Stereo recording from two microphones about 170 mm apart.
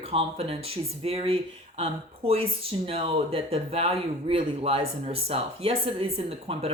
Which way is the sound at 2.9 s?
35° right (ahead or behind).